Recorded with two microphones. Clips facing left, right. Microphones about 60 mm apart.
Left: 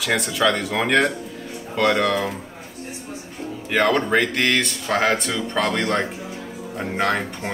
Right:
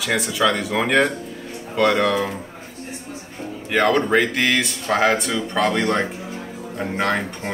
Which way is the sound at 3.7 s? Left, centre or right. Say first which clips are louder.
Right 1 dB; centre.